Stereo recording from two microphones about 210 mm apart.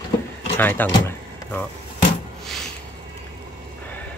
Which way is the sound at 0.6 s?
10° left (ahead or behind).